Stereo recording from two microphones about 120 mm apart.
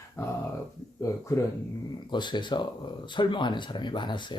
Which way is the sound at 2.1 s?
40° left (ahead or behind).